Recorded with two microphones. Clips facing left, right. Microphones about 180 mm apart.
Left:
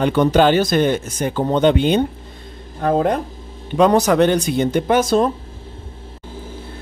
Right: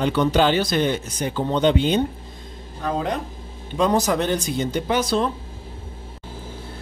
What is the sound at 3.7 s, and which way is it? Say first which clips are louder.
Speech: left 6 dB; 65° left (ahead or behind).